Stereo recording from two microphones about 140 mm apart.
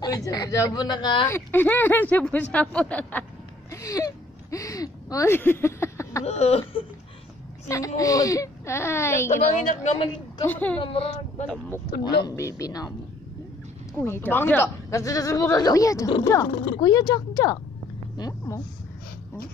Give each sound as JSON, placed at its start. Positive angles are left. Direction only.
{"t": 0.0, "sound": "a woman's voice", "side_deg": 25}
{"t": 1.2, "sound": "speech", "side_deg": 15}
{"t": 3.7, "sound": "speech", "side_deg": 25}
{"t": 6.2, "sound": "a sound", "side_deg": 50}
{"t": 7.6, "sound": "a woman's voice", "side_deg": 25}
{"t": 9.3, "sound": "a woman's voice", "side_deg": 60}
{"t": 10.4, "sound": "speech", "side_deg": 15}
{"t": 10.8, "sound": "speech", "side_deg": 40}
{"t": 12.0, "sound": "a woman's voice", "side_deg": 30}
{"t": 13.9, "sound": "a woman's voice", "side_deg": 15}
{"t": 18.1, "sound": "a sound", "side_deg": 30}